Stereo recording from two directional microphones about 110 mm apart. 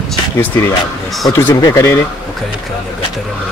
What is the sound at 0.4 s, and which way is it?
Speech, 25° left (ahead or behind).